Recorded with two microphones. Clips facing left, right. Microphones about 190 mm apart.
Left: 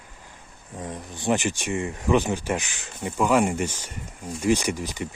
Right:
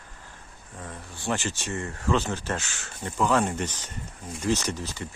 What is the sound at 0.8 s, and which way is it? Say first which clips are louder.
Speech: left 6 dB; 20° left (ahead or behind).